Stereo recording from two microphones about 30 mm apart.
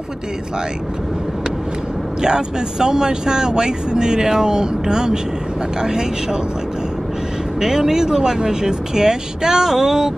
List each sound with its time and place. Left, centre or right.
2.2 s speech: right
7.6 s speech: centre